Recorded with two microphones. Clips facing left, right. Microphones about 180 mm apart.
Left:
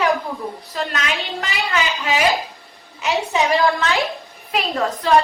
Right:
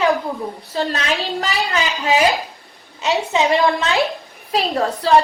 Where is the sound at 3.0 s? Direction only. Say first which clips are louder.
Right 2 dB; 25° right (ahead or behind).